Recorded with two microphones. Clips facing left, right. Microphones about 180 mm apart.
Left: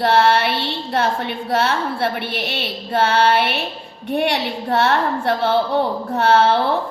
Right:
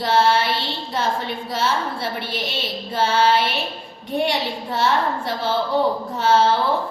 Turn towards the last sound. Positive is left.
turn(degrees=65)  # may be behind; listen again after turning